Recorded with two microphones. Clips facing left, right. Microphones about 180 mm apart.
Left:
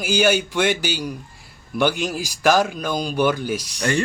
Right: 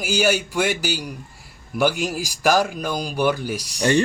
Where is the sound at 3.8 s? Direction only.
20° right (ahead or behind).